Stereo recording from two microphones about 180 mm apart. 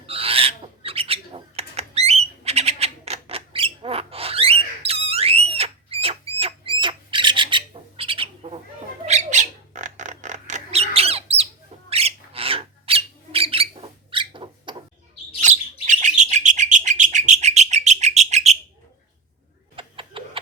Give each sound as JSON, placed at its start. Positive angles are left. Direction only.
{"t": 0.0, "sound": "owl", "side_deg": -30}
{"t": 9.0, "sound": "bird", "side_deg": -40}
{"t": 15.4, "sound": "bird", "side_deg": -40}
{"t": 19.7, "sound": "clock", "side_deg": -30}